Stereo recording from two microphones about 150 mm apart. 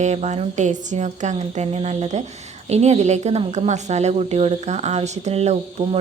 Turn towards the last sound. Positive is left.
turn(degrees=-45)  # may be behind; listen again after turning